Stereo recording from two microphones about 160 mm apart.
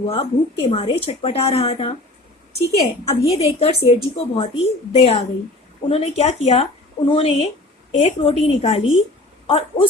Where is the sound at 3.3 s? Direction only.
40° left (ahead or behind).